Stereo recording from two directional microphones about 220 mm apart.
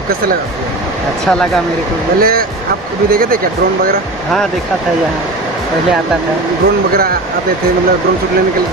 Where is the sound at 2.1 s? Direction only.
40° right (ahead or behind).